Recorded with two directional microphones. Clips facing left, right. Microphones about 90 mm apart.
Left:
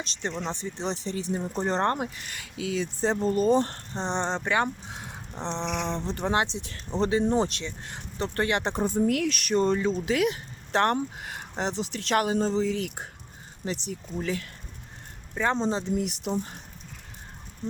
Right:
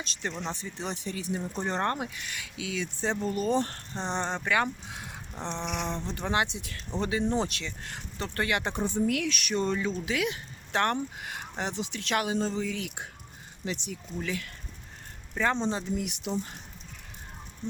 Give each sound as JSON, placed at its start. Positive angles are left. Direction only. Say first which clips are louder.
{"t": 0.0, "sound": "speech", "louder": "left 3 dB", "side_deg": 25}
{"t": 7.6, "sound": "speech", "louder": "left 2 dB", "side_deg": 25}
{"t": 15.7, "sound": "speech", "louder": "left 4 dB", "side_deg": 35}